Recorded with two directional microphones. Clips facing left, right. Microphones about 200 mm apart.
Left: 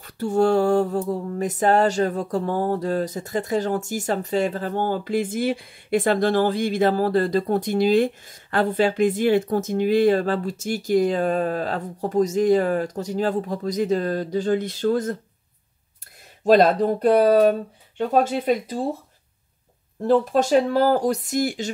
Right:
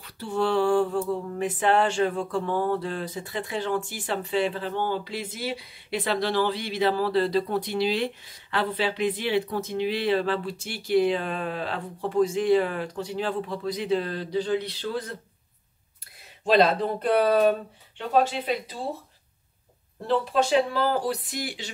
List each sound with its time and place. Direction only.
0.0 s mantra: 45° left (ahead or behind)
16.4 s mantra: 45° left (ahead or behind)
20.1 s mantra: 45° left (ahead or behind)